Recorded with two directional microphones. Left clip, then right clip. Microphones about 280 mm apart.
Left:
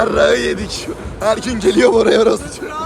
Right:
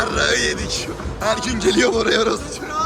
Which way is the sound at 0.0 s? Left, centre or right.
Centre.